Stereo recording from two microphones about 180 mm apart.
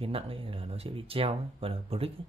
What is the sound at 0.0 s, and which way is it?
Speech, 30° right (ahead or behind).